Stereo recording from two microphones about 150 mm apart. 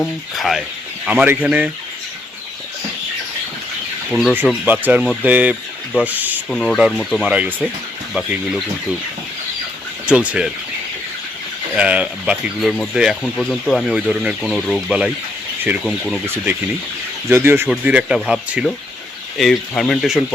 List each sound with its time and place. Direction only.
0.3 s speech: centre (ahead or behind)
4.1 s speech: centre (ahead or behind)
6.5 s speech: 5° left (ahead or behind)
10.1 s speech: 5° right (ahead or behind)
11.8 s speech: 10° right (ahead or behind)
16.2 s speech: 15° right (ahead or behind); by 20.2 s centre (ahead or behind)